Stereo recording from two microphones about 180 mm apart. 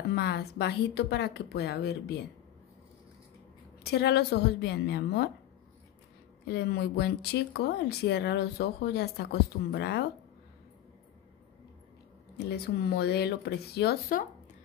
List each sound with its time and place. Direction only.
0.1 s speech: 65° left (ahead or behind)
3.8 s speech: 65° left (ahead or behind)
6.4 s speech: 65° left (ahead or behind)
12.4 s speech: 65° left (ahead or behind)